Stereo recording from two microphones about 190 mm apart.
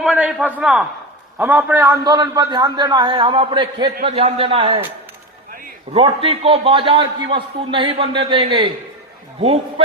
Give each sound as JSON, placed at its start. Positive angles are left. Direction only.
{"t": 0.0, "sound": "a man's voice", "side_deg": -5}
{"t": 5.9, "sound": "a man's voice", "side_deg": -30}